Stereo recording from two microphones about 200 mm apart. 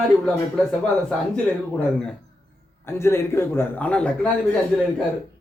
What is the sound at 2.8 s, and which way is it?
Speech, 15° left (ahead or behind).